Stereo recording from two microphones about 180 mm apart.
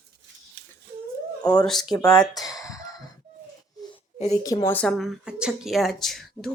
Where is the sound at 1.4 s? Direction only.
20° left (ahead or behind).